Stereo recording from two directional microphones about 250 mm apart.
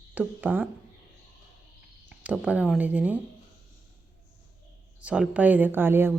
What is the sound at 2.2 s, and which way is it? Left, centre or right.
A woman's voice, centre.